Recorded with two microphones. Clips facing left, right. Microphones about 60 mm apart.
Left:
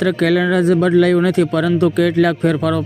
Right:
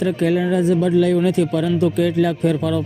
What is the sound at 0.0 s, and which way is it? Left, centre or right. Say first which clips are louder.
Speech: left 3 dB; left.